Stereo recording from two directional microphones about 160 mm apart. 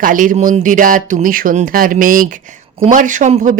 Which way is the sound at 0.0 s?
60° right (ahead or behind).